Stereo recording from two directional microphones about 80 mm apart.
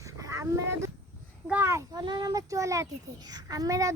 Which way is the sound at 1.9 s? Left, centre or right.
Right.